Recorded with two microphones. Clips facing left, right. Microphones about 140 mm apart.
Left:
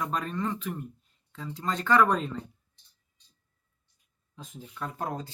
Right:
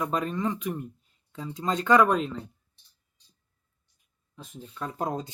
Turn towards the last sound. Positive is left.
turn(degrees=-20)  # may be behind; listen again after turning